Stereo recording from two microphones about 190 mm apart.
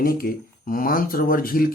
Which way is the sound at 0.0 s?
50° left (ahead or behind).